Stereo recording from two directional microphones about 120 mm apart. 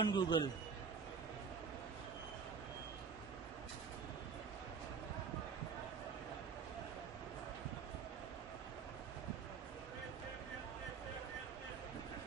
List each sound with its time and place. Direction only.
0.0 s a man's voice: 40° left (ahead or behind)